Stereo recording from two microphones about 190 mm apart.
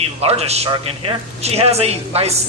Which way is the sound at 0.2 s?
30° right (ahead or behind).